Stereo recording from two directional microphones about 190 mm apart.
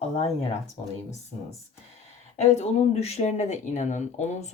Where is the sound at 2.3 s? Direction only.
35° left (ahead or behind).